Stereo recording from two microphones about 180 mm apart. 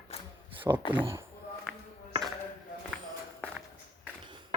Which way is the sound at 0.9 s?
15° right (ahead or behind).